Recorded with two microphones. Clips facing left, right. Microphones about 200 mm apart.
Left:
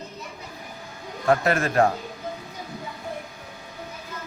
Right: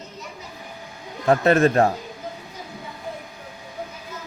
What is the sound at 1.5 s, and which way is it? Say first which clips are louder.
Speech: right 4 dB; 30° right (ahead or behind).